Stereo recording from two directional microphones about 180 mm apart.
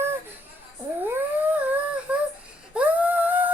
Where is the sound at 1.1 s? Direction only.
10° right (ahead or behind).